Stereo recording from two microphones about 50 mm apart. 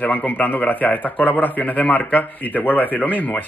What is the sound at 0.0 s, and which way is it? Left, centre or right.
A man's voice, left.